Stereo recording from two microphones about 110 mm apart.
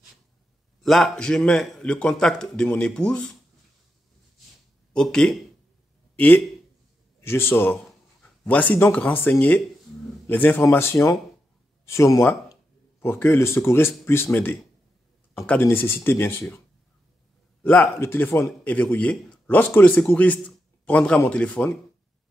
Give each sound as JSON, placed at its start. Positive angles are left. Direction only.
{"t": 0.8, "sound": "a man's voice", "side_deg": 0}
{"t": 4.9, "sound": "a man's voice", "side_deg": 5}
{"t": 6.1, "sound": "a man's voice", "side_deg": 15}
{"t": 17.6, "sound": "a man's voice", "side_deg": 10}
{"t": 17.9, "sound": "a man's voice", "side_deg": 20}